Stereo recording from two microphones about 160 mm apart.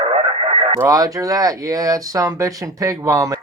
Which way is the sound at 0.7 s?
20° right (ahead or behind).